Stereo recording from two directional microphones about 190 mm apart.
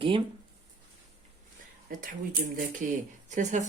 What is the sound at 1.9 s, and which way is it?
Speech, 45° right (ahead or behind).